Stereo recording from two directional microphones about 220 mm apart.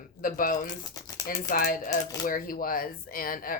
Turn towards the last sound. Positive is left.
turn(degrees=40)  # may be behind; listen again after turning